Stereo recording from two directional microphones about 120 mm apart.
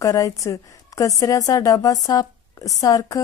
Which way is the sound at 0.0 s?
30° left (ahead or behind).